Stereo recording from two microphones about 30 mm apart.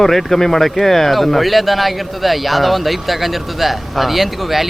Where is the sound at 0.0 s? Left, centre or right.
Centre.